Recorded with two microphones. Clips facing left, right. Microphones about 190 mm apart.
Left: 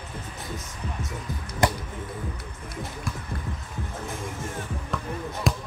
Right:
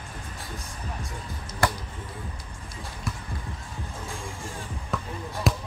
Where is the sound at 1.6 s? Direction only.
20° left (ahead or behind).